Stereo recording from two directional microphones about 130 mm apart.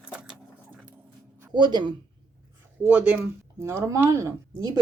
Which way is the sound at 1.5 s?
35° right (ahead or behind).